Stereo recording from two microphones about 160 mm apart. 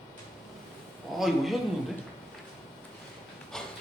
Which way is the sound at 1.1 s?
Centre (ahead or behind).